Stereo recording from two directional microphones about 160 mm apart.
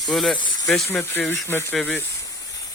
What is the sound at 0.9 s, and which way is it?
Speech, 15° left (ahead or behind).